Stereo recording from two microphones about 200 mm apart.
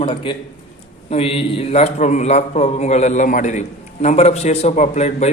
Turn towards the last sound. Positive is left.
turn(degrees=35)  # may be behind; listen again after turning